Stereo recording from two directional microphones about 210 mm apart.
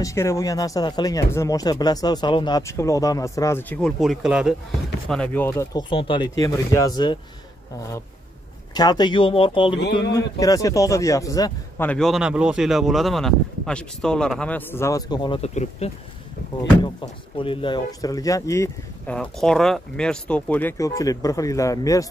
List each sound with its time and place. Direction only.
0.0 s speech: 15° left (ahead or behind); by 4.6 s 5° right (ahead or behind)
5.1 s speech: 5° left (ahead or behind)
8.7 s speech: 20° left (ahead or behind)
11.9 s speech: centre (ahead or behind)
19.1 s speech: 5° left (ahead or behind)